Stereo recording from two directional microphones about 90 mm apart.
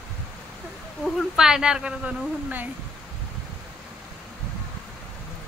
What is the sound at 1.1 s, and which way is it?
A woman's voice, 5° right (ahead or behind).